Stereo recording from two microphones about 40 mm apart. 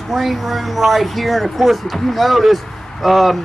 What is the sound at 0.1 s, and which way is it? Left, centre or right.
Speech, centre.